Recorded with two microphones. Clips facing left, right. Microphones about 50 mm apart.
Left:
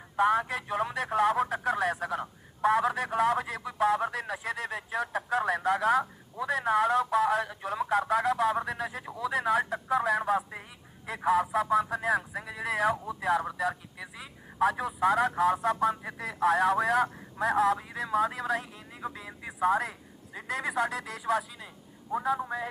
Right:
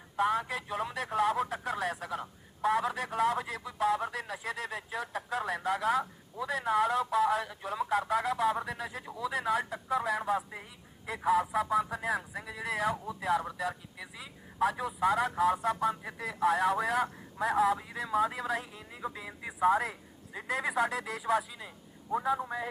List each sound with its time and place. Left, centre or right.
0.7 s speech: centre
9.0 s speech: left
9.4 s speech: centre
12.3 s speech: centre
14.6 s a man's voice: centre